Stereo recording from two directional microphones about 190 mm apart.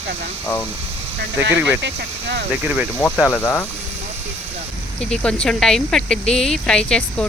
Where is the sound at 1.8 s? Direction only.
65° right (ahead or behind).